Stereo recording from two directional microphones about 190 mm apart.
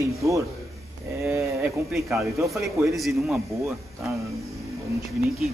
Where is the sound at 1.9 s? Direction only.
Centre (ahead or behind).